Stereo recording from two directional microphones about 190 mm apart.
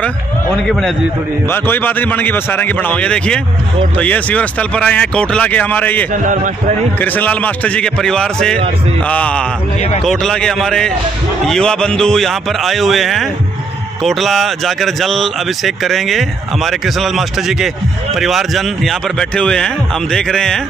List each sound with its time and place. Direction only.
1.5 s speech: 10° left (ahead or behind)
6.1 s a man's voice: 40° right (ahead or behind)
7.0 s speech: 10° left (ahead or behind)